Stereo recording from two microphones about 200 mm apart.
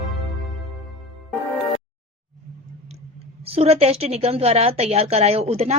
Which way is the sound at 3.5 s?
30° right (ahead or behind).